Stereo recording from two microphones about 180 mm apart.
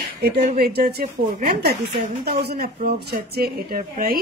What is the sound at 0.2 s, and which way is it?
Speech, 65° right (ahead or behind).